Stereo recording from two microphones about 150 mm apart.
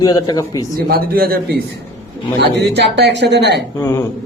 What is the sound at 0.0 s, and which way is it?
Speech, 25° left (ahead or behind).